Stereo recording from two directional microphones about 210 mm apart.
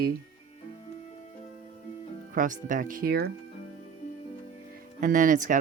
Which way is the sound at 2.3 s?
40° right (ahead or behind).